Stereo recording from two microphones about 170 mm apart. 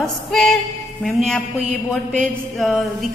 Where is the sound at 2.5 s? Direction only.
Centre (ahead or behind).